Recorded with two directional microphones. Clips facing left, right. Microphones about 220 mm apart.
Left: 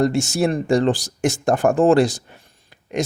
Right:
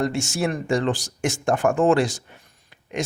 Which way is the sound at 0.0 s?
40° left (ahead or behind).